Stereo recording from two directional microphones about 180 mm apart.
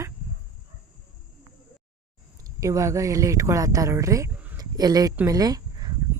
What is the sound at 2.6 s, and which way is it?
A woman's voice, 15° right (ahead or behind).